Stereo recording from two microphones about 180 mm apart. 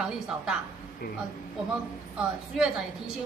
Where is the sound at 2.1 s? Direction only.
5° right (ahead or behind).